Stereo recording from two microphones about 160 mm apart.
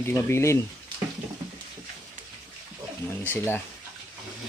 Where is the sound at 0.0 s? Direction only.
15° left (ahead or behind).